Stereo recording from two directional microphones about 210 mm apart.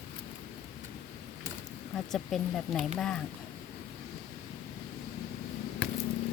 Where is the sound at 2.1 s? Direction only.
Centre (ahead or behind).